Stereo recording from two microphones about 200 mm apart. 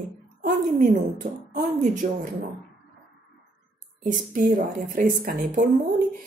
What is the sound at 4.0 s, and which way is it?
A woman's voice, 40° right (ahead or behind).